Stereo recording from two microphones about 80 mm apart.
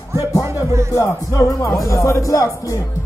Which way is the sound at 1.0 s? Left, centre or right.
Left.